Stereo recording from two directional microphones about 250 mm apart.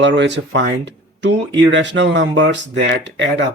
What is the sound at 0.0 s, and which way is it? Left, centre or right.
Speech, right.